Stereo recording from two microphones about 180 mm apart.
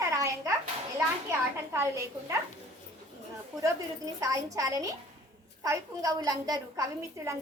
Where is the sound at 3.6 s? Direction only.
20° right (ahead or behind).